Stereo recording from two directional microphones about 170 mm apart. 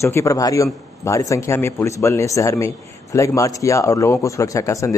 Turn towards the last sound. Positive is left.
turn(degrees=20)  # may be behind; listen again after turning